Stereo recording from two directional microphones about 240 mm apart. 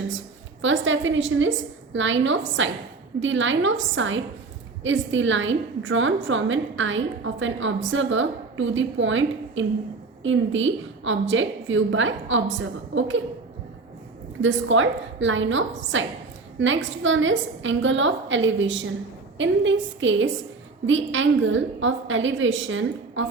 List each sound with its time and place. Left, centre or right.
0.6 s a woman's voice: right
14.4 s a woman's voice: right